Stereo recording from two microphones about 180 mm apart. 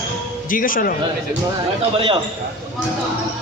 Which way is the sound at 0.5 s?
50° left (ahead or behind).